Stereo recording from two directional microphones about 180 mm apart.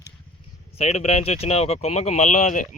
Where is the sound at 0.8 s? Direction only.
35° left (ahead or behind).